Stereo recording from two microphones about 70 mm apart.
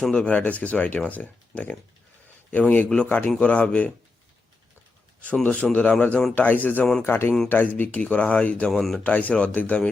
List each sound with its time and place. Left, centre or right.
0.0 s speech: centre
5.2 s speech: centre